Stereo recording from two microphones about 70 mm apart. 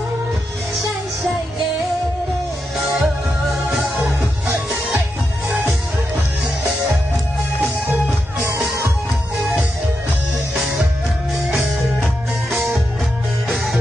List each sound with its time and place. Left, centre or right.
2.8 s music: centre
8.5 s music: right
10.5 s music: centre